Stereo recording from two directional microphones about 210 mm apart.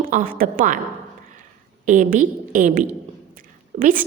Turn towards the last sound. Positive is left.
turn(degrees=-35)  # may be behind; listen again after turning